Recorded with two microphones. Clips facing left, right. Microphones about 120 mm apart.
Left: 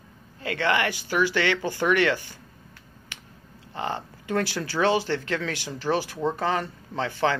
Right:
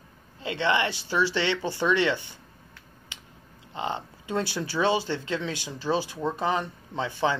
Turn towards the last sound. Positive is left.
turn(degrees=-20)  # may be behind; listen again after turning